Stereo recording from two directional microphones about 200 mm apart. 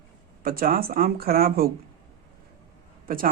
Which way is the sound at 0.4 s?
45° right (ahead or behind).